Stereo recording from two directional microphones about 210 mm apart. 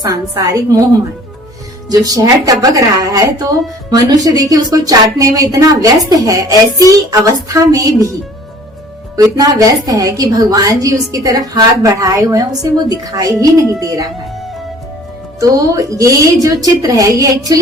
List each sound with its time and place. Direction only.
0.0 s a woman's voice: 15° right (ahead or behind)
1.9 s a woman's voice: 15° right (ahead or behind)
9.1 s a woman's voice: 15° right (ahead or behind)
15.4 s a woman's voice: 15° right (ahead or behind)